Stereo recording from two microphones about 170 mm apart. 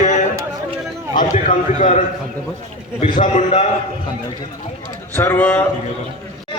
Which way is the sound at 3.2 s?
45° left (ahead or behind).